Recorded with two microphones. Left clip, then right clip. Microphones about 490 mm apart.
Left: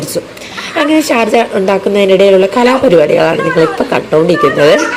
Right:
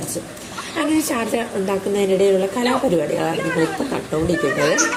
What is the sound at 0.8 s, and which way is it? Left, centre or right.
A woman's voice, right.